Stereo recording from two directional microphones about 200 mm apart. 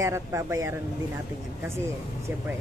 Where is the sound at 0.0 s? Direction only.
15° right (ahead or behind).